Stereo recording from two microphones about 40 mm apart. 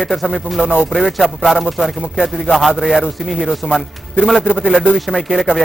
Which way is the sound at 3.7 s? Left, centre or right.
Centre.